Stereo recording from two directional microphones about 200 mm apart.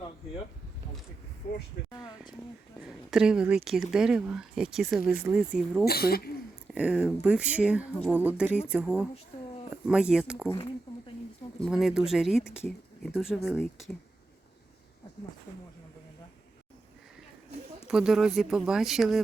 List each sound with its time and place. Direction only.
1.9 s speech: 20° left (ahead or behind)
3.1 s speech: 5° right (ahead or behind)
5.8 s speech: 50° left (ahead or behind)
6.7 s speech: 5° right (ahead or behind)
11.6 s speech: centre (ahead or behind)
17.8 s speech: centre (ahead or behind)